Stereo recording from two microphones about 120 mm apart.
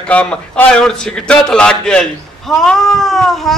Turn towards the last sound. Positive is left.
turn(degrees=0)  # may be behind; listen again after turning